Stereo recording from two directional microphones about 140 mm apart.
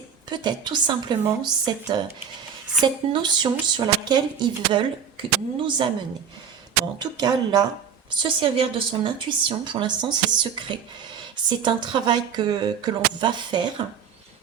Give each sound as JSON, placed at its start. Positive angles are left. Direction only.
{"t": 0.3, "sound": "a woman's voice", "side_deg": -30}
{"t": 7.0, "sound": "a woman's voice", "side_deg": -30}